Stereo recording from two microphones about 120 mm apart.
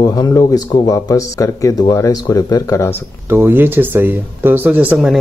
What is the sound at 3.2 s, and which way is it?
Speech, 20° right (ahead or behind).